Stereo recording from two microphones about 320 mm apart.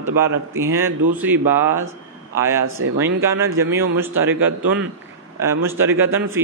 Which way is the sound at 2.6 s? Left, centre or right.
Right.